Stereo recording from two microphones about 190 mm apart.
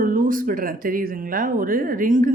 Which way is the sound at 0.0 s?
45° right (ahead or behind).